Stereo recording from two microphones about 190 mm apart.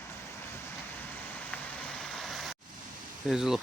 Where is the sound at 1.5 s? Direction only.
10° left (ahead or behind).